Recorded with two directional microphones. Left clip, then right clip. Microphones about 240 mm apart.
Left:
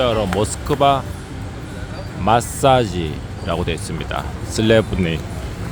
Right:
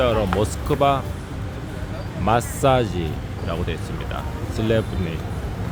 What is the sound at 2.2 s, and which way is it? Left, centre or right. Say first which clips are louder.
Speech: left 4 dB; centre.